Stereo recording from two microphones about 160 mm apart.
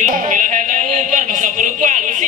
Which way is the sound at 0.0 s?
55° right (ahead or behind).